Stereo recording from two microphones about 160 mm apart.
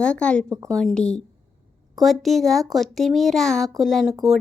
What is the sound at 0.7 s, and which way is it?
A woman's voice, 5° left (ahead or behind).